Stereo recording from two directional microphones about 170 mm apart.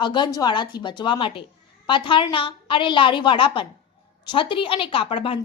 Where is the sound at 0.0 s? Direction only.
25° left (ahead or behind).